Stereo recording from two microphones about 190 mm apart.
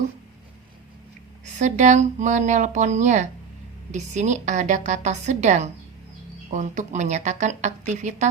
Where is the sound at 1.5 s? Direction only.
40° right (ahead or behind).